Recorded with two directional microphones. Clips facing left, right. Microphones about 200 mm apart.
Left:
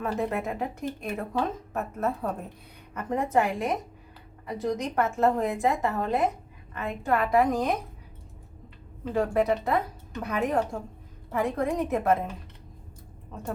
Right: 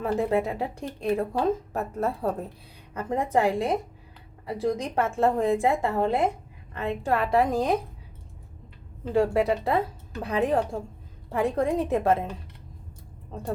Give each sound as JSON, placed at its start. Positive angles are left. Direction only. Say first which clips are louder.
{"t": 0.0, "sound": "a woman's voice", "louder": "right 4 dB", "side_deg": -30}
{"t": 9.1, "sound": "a woman's voice", "louder": "right 2 dB", "side_deg": -30}